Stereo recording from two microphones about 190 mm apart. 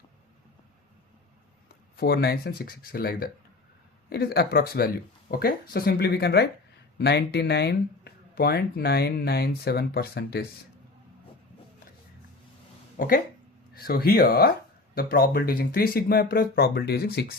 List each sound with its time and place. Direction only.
2.0 s speech: 55° left (ahead or behind)
13.8 s speech: 55° left (ahead or behind)